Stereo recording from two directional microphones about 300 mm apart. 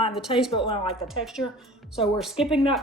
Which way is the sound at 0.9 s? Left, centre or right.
Centre.